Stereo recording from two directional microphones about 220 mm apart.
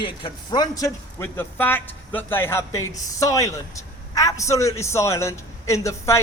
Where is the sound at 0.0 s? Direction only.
20° left (ahead or behind).